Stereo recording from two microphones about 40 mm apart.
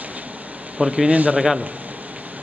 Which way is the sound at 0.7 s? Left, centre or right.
Centre.